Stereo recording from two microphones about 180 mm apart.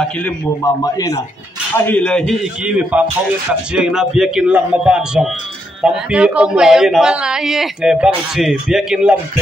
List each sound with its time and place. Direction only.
0.7 s a man's voice: 20° left (ahead or behind)
1.8 s a man's voice: 10° left (ahead or behind)
2.6 s a man's voice: 5° right (ahead or behind)